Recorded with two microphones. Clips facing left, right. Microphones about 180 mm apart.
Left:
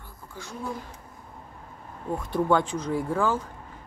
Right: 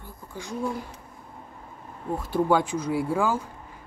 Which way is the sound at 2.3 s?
10° right (ahead or behind).